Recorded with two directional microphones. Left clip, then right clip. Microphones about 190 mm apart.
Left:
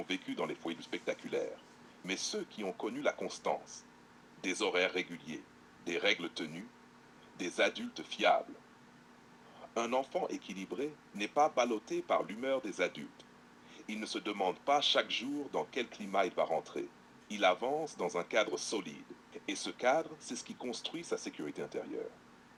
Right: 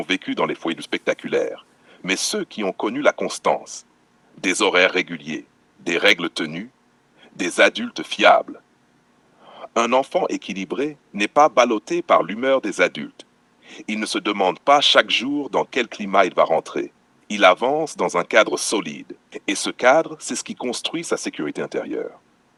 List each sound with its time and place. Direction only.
0.0 s speech: 45° right (ahead or behind)
9.6 s speech: 45° right (ahead or behind)